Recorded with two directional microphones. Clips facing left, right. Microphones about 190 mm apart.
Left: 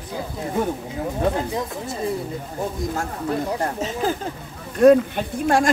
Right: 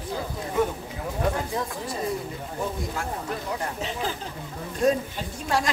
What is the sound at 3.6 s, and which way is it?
Speech, 45° left (ahead or behind).